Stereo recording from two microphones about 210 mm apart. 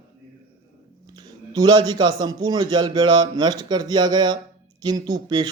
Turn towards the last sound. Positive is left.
turn(degrees=-20)  # may be behind; listen again after turning